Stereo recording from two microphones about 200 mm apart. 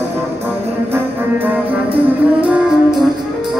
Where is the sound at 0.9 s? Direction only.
10° right (ahead or behind).